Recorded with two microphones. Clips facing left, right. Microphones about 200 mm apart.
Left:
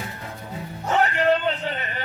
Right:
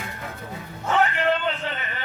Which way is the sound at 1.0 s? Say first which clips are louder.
Left 3 dB; 40° left (ahead or behind).